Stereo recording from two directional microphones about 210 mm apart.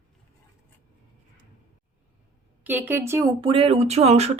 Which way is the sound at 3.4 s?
25° right (ahead or behind).